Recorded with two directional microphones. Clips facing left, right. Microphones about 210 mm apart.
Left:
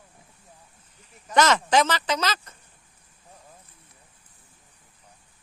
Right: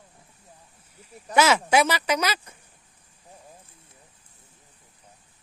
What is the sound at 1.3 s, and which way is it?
Speech, 10° right (ahead or behind).